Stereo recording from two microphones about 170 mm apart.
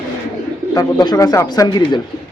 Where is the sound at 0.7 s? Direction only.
20° left (ahead or behind).